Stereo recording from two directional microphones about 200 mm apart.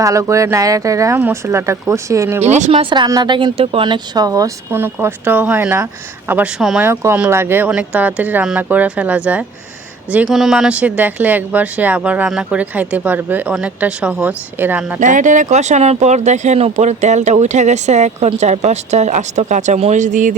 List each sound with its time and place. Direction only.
0.0 s a woman's voice: 15° right (ahead or behind)
2.4 s speech: 35° right (ahead or behind)
2.9 s a woman's voice: 20° right (ahead or behind)
15.0 s speech: 40° right (ahead or behind)